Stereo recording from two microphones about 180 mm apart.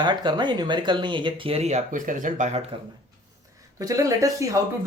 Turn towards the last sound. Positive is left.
turn(degrees=-20)  # may be behind; listen again after turning